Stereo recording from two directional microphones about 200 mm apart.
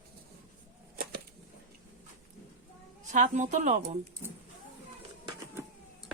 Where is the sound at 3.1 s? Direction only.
40° right (ahead or behind).